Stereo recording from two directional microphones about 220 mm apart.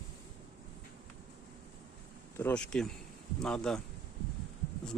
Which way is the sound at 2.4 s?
5° left (ahead or behind).